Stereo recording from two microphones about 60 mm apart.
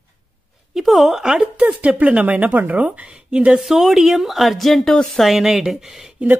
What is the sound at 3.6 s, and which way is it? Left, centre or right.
Speech, centre.